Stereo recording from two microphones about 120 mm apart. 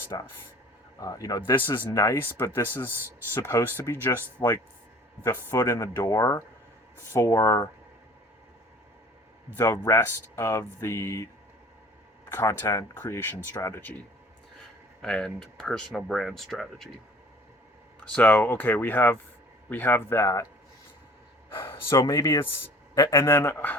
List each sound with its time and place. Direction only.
0.1 s speech: 35° left (ahead or behind); by 4.4 s 15° left (ahead or behind)
5.5 s speech: 25° left (ahead or behind)
9.6 s speech: 25° left (ahead or behind)
12.3 s speech: 20° left (ahead or behind)
15.0 s speech: 5° left (ahead or behind)
18.0 s speech: 10° left (ahead or behind)
21.5 s a sound: 20° left (ahead or behind)
22.0 s speech: 30° left (ahead or behind)